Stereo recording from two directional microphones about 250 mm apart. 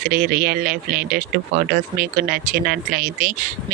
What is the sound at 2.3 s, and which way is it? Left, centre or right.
Speech, right.